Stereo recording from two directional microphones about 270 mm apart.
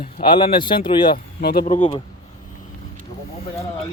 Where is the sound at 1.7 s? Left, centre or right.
Centre.